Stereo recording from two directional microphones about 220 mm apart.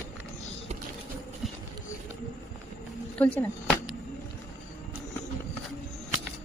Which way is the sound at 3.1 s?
5° left (ahead or behind).